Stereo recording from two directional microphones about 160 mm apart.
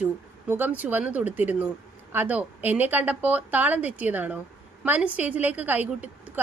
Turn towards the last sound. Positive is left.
turn(degrees=-10)  # may be behind; listen again after turning